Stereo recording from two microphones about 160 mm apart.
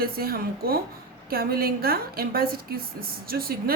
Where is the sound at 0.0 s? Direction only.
70° right (ahead or behind).